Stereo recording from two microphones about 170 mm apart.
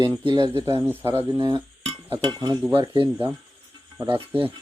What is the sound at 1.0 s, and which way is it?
Speech, 30° right (ahead or behind).